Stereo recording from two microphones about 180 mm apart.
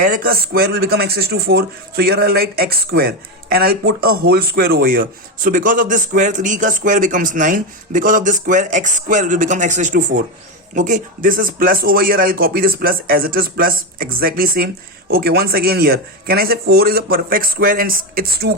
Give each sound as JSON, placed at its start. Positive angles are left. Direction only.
{"t": 0.0, "sound": "speech", "side_deg": -55}